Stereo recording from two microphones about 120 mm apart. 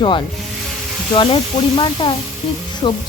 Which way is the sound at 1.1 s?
40° left (ahead or behind).